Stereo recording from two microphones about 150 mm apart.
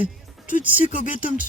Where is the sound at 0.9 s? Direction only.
60° left (ahead or behind).